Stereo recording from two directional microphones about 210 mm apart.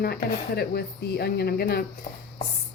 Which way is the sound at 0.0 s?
50° left (ahead or behind).